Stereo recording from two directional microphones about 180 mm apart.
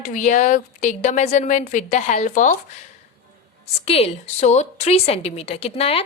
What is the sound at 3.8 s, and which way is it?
A woman's voice, 35° left (ahead or behind).